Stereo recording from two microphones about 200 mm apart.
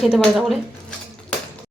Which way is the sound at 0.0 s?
Centre (ahead or behind).